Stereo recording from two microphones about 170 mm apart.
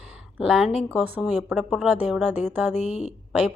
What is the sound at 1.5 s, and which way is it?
Speech, centre (ahead or behind).